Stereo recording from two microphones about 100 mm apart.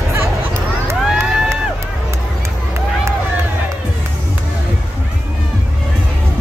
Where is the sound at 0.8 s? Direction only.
30° right (ahead or behind).